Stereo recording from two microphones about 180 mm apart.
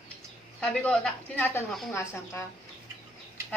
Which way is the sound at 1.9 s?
15° left (ahead or behind).